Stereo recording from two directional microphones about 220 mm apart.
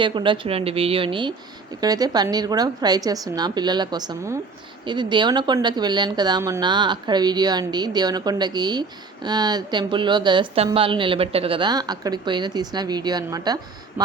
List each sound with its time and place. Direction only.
0.0 s a woman's voice: 20° right (ahead or behind)